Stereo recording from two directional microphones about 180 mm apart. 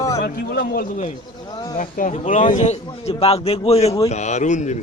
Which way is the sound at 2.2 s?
35° left (ahead or behind).